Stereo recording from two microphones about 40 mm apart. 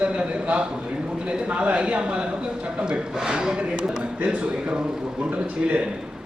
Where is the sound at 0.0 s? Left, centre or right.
Right.